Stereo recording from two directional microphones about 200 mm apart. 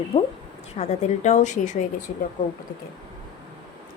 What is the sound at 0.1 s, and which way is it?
Speech, 30° left (ahead or behind).